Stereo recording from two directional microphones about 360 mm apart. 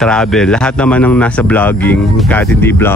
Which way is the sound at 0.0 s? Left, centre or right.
Centre.